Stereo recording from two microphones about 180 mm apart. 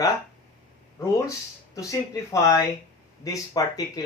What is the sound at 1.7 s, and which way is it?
Speech, 20° left (ahead or behind).